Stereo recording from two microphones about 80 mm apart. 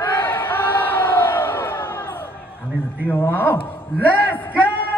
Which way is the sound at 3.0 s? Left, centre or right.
Left.